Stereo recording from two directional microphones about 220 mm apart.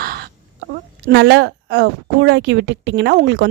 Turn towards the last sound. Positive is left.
turn(degrees=-55)  # may be behind; listen again after turning